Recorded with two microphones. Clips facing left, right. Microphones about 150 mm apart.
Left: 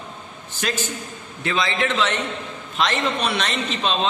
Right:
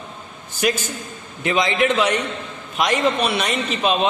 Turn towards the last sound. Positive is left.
turn(degrees=-10)  # may be behind; listen again after turning